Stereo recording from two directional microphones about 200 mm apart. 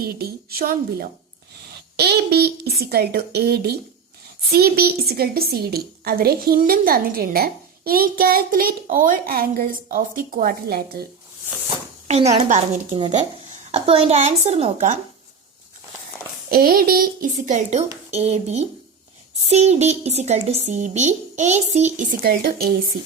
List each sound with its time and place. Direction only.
0.0 s a woman's voice: 50° right (ahead or behind)
12.0 s speech: 35° right (ahead or behind)
16.5 s a woman's voice: 50° right (ahead or behind)